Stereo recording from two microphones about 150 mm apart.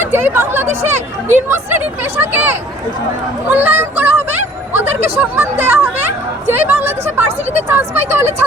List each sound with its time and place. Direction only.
0.0 s speech: 15° right (ahead or behind)
3.5 s a sound: 15° right (ahead or behind)
5.0 s speech: 15° right (ahead or behind)
7.3 s speech: 45° right (ahead or behind)
7.7 s speech: 15° right (ahead or behind)